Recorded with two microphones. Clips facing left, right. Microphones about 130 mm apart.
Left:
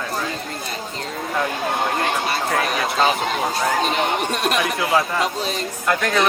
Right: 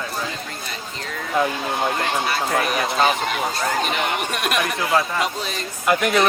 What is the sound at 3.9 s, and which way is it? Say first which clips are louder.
Speech: left 3 dB; 25° left (ahead or behind).